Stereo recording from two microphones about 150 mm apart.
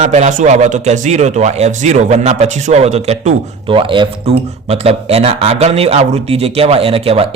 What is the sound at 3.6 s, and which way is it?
Speech, 35° right (ahead or behind).